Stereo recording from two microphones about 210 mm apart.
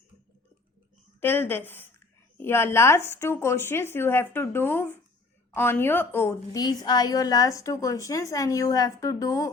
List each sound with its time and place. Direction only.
1.2 s a woman's voice: 10° left (ahead or behind)